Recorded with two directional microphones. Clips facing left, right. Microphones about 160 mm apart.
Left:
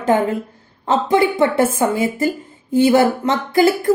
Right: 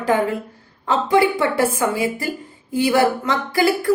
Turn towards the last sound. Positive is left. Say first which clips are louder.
# left 4 dB
turn(degrees=20)  # may be behind; listen again after turning